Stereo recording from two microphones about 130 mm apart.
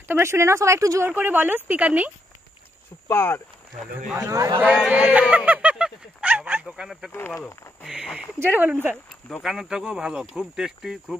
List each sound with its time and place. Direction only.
0.1 s speech: 20° right (ahead or behind)
3.1 s speech: 20° left (ahead or behind)
4.3 s a man's voice: 25° right (ahead or behind)
4.6 s a sound: 10° right (ahead or behind)
7.1 s speech: 15° left (ahead or behind)
7.8 s speech: centre (ahead or behind)
8.4 s speech: 15° right (ahead or behind)
8.9 s speech: centre (ahead or behind)